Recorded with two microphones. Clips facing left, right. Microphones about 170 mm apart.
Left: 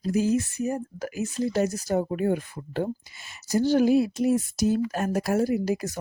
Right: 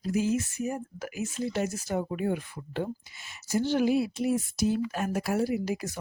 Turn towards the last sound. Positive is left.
turn(degrees=40)  # may be behind; listen again after turning